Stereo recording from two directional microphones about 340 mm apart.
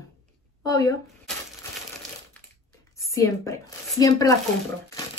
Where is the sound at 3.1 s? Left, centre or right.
Centre.